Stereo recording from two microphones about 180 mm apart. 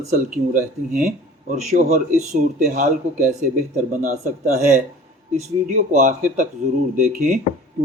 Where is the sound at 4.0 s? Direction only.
40° right (ahead or behind).